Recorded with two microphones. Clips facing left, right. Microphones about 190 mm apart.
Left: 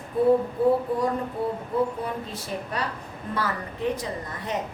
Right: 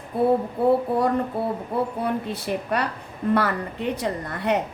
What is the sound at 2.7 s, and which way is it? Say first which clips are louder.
A woman's voice: right 5 dB; 65° right (ahead or behind).